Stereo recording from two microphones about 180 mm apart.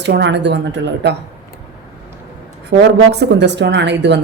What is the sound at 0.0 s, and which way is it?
A woman's voice, 75° right (ahead or behind).